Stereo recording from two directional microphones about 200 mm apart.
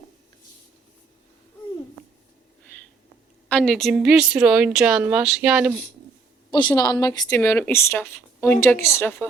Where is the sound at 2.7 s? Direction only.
10° left (ahead or behind).